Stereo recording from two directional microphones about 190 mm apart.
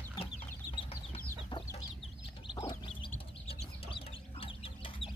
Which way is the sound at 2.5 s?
25° left (ahead or behind).